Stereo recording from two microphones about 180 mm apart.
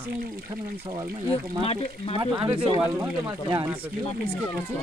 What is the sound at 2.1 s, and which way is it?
Speech, 30° right (ahead or behind).